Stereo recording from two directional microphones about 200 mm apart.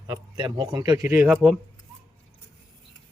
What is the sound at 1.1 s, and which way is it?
Speech, 5° right (ahead or behind).